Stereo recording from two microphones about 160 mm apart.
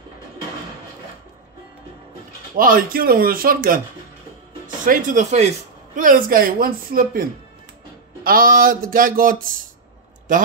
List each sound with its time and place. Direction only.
2.5 s speech: 60° right (ahead or behind)
4.8 s speech: 50° right (ahead or behind)
5.9 s speech: 60° right (ahead or behind)